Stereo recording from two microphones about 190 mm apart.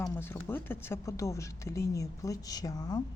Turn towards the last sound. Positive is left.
turn(degrees=20)  # may be behind; listen again after turning